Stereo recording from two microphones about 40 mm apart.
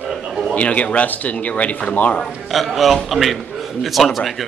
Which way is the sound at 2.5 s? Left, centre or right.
Centre.